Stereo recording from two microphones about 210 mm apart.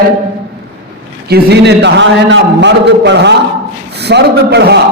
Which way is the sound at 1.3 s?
50° right (ahead or behind).